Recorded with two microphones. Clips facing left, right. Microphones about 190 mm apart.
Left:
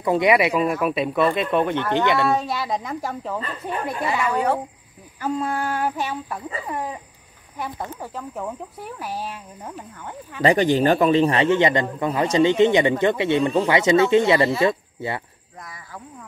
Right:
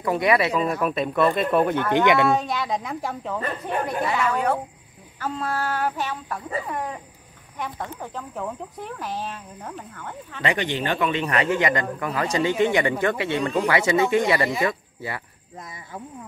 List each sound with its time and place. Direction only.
0.0 s speech: 20° left (ahead or behind); by 2.2 s 15° right (ahead or behind)
2.2 s speech: centre (ahead or behind)
10.4 s a man's voice: 40° left (ahead or behind)
15.6 s speech: 25° right (ahead or behind)